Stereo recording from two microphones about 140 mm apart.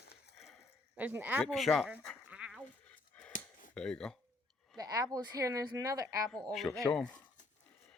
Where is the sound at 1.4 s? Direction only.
Centre (ahead or behind).